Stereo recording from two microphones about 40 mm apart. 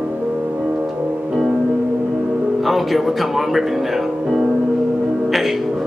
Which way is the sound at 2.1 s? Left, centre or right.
Right.